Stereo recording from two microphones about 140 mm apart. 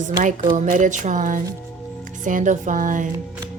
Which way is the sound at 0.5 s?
60° right (ahead or behind).